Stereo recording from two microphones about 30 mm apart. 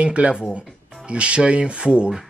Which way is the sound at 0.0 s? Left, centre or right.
Right.